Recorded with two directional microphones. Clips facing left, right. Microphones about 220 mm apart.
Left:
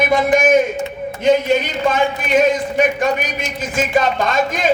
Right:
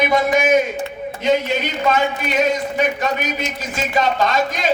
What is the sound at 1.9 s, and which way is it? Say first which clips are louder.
Speech: left 2 dB; 50° left (ahead or behind).